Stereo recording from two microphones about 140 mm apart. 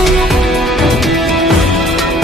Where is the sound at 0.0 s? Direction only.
Centre (ahead or behind).